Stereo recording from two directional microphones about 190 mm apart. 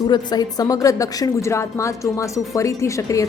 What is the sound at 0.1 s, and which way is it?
A woman's voice, 20° left (ahead or behind).